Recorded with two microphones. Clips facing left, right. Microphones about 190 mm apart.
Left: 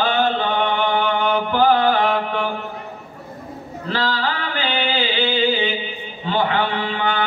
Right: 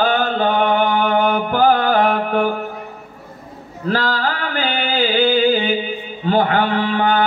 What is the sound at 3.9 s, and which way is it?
Mantra, 45° right (ahead or behind).